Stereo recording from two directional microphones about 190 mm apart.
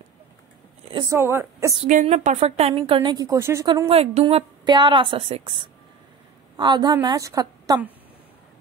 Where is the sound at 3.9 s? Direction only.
30° right (ahead or behind).